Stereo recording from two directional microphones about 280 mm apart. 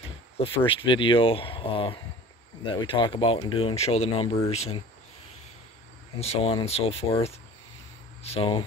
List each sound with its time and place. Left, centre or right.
0.7 s speech: centre
6.1 s speech: left